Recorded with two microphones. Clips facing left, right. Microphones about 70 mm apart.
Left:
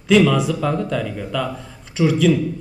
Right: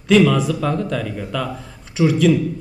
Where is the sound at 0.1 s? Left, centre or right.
Centre.